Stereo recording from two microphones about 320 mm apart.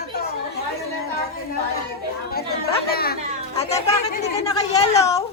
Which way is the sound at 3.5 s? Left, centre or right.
Left.